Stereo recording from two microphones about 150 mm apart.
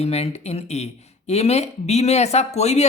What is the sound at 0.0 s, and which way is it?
Speech, 45° left (ahead or behind).